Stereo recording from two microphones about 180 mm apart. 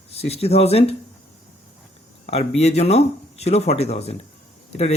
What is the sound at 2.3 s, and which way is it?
Speech, 35° left (ahead or behind).